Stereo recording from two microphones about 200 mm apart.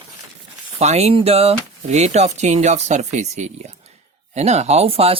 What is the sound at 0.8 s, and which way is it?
Speech, 30° right (ahead or behind).